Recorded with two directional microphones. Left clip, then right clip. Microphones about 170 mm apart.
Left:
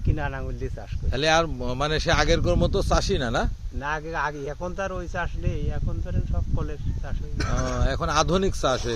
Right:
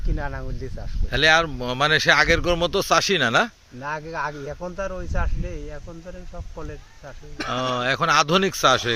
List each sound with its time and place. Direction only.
0.2 s speech: 30° left (ahead or behind)
1.1 s speech: centre (ahead or behind)
3.8 s speech: 30° left (ahead or behind)
7.5 s speech: centre (ahead or behind)